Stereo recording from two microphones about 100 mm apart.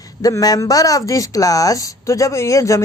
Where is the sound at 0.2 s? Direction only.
35° left (ahead or behind).